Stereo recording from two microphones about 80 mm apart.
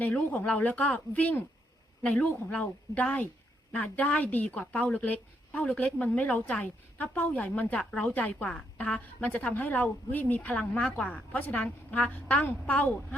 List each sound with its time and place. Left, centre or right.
0.0 s a woman's voice: centre